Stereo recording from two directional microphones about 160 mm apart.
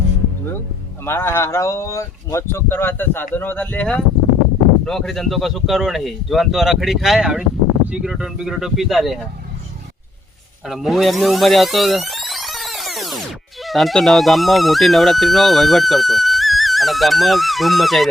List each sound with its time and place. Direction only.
1.0 s speech: 15° left (ahead or behind); by 9.1 s centre (ahead or behind)
10.7 s speech: centre (ahead or behind)